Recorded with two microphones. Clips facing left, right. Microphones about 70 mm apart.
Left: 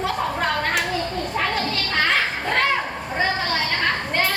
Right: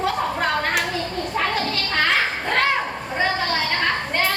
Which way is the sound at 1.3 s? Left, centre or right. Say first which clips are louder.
Right 1 dB; centre.